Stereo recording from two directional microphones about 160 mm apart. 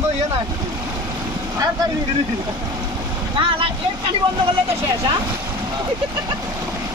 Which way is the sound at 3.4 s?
35° right (ahead or behind).